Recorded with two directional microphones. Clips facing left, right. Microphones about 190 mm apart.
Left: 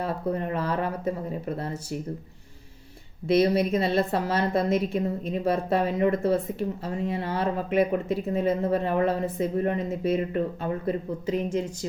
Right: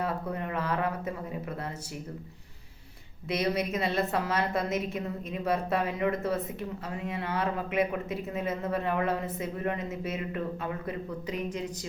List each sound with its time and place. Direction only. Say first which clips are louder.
0.0 s a woman's voice: left 4 dB; 35° left (ahead or behind)
3.2 s a woman's voice: left 8 dB; 30° left (ahead or behind)